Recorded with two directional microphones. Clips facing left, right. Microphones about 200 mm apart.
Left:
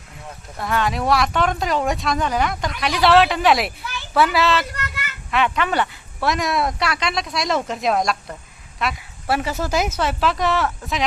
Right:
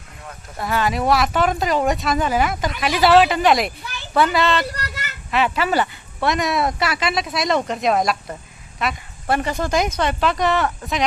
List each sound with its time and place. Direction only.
0.6 s speech: centre (ahead or behind)
4.6 s child singing: 35° right (ahead or behind)
5.3 s speech: 5° right (ahead or behind)